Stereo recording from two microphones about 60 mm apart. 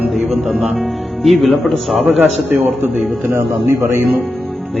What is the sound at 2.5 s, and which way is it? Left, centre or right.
Speech, right.